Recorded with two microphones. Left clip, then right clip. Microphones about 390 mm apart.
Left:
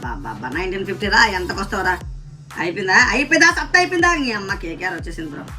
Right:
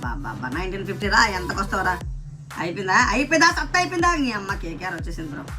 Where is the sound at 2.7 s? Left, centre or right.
Centre.